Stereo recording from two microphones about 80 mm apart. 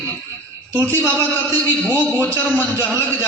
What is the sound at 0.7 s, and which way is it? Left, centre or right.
Speech, left.